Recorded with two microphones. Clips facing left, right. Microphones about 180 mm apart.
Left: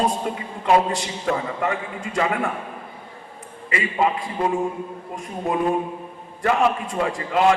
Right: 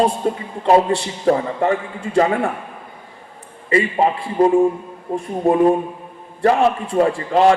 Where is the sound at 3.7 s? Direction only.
35° right (ahead or behind).